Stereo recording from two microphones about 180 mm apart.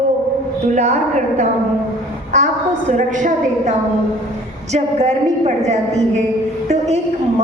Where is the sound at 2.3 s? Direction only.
40° right (ahead or behind).